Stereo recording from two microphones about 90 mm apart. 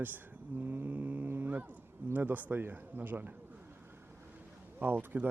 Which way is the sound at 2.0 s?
20° right (ahead or behind).